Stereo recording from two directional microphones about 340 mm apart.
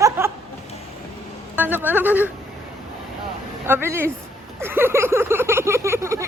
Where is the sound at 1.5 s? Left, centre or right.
Centre.